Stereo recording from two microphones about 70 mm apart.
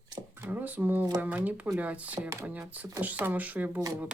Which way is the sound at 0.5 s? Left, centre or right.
Right.